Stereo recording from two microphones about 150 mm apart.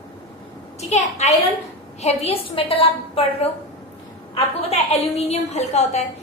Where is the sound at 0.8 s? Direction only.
50° left (ahead or behind).